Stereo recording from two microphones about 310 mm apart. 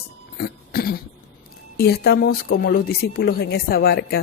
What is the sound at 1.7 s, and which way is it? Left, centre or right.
Speech, left.